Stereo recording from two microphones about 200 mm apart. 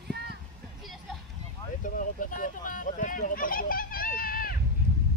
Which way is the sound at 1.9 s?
40° left (ahead or behind).